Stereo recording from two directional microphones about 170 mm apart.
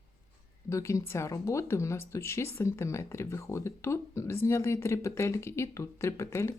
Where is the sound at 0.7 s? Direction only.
20° left (ahead or behind).